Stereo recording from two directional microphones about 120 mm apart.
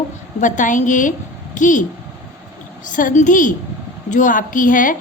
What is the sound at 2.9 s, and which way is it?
A woman's voice, 90° left.